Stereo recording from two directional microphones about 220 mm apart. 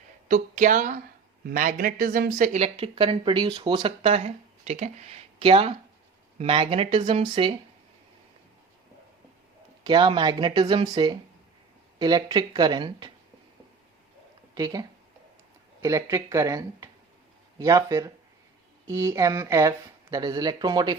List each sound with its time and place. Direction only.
0.3 s speech: 35° right (ahead or behind)
9.8 s speech: 20° right (ahead or behind)
14.5 s speech: 15° right (ahead or behind)